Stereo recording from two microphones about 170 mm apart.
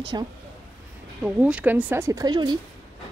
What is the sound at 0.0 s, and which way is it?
Speech, 25° right (ahead or behind).